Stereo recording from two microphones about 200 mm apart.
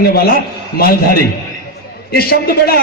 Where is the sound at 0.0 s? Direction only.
50° left (ahead or behind).